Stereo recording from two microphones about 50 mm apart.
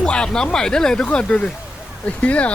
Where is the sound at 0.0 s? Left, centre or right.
Centre.